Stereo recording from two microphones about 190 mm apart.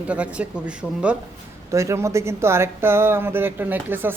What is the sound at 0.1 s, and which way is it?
Speech, 5° right (ahead or behind).